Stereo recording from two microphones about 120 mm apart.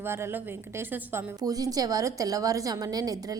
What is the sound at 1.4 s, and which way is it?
A woman's voice, 30° right (ahead or behind).